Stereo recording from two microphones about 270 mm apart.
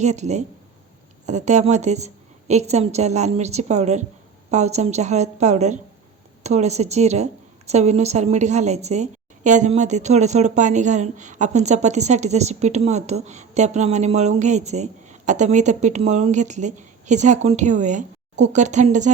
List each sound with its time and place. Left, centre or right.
0.0 s a woman's voice: right